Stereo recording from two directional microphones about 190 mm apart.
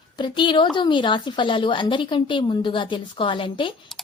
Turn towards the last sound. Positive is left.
turn(degrees=25)  # may be behind; listen again after turning